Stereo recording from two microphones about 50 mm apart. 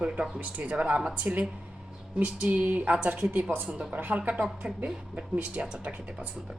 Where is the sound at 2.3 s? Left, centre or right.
Right.